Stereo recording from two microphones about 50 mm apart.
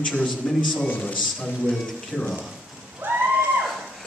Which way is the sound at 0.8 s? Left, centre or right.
Left.